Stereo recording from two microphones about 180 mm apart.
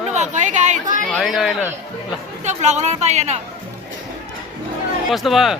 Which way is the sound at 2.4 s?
40° right (ahead or behind).